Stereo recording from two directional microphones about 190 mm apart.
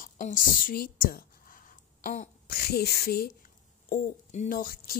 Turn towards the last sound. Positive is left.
turn(degrees=50)  # may be behind; listen again after turning